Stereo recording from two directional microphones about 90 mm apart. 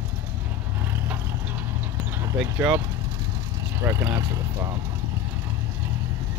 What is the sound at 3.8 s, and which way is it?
Speech, 30° right (ahead or behind).